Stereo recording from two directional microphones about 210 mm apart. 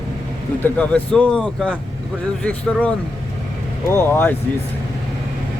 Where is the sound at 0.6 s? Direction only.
5° left (ahead or behind).